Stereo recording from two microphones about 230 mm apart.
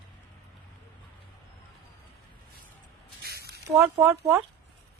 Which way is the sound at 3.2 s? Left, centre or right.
Right.